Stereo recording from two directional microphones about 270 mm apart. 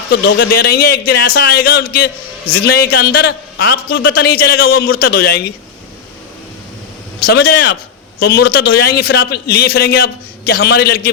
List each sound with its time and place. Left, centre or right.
0.1 s a man's voice: left
7.3 s a man's voice: left